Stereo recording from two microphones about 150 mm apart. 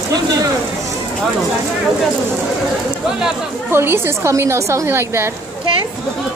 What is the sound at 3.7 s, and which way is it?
A woman's voice, 15° right (ahead or behind).